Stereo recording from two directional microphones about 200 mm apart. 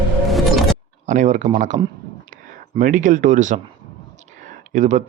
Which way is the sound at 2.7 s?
40° right (ahead or behind).